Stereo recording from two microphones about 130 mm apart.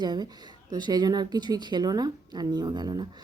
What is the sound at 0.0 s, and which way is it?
A woman's voice, 35° right (ahead or behind).